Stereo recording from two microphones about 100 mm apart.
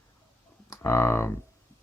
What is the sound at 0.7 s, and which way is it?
Speech, 25° left (ahead or behind).